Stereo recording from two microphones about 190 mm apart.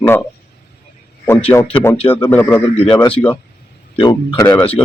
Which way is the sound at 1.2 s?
10° left (ahead or behind).